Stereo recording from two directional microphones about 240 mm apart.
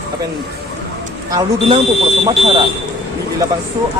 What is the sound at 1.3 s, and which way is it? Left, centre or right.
Speech, centre.